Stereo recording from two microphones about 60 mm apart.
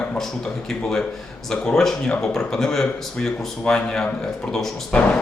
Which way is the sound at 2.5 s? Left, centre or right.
Centre.